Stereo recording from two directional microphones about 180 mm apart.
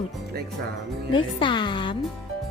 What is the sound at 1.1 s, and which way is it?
Speech, 25° left (ahead or behind).